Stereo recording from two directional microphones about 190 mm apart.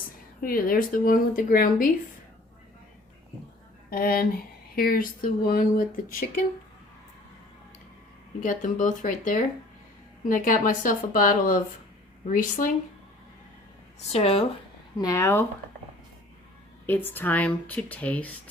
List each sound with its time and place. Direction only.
0.4 s speech: 50° left (ahead or behind)
3.8 s speech: 50° left (ahead or behind)
8.4 s speech: 45° left (ahead or behind)
14.1 s speech: 35° left (ahead or behind)
14.9 s speech: 15° left (ahead or behind)
16.8 s speech: 10° left (ahead or behind)